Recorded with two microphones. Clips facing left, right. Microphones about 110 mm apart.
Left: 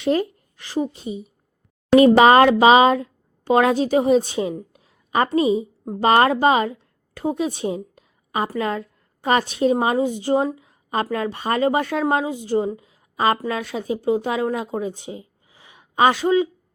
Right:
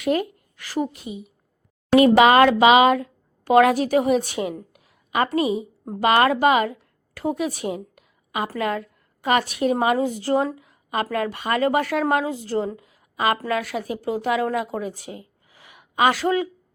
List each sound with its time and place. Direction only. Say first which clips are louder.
0.0 s a woman's voice: left 2 dB; 30° left (ahead or behind)
4.7 s a sound: left 3 dB; 30° left (ahead or behind)
6.0 s a woman's voice: left 2 dB; 30° left (ahead or behind)